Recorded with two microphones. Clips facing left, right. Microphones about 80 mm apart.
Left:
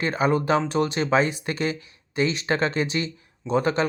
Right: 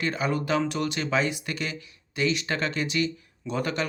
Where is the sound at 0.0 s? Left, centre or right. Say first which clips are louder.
Left 5 dB; left.